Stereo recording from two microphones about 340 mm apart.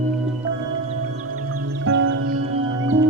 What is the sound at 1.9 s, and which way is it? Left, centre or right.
Music, right.